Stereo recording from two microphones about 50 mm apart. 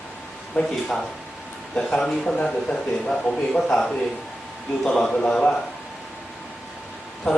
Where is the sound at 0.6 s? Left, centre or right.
Left.